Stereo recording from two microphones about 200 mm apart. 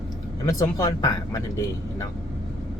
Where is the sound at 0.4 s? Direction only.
20° left (ahead or behind).